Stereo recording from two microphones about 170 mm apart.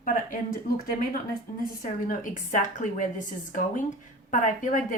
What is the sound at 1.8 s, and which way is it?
Speech, 50° left (ahead or behind).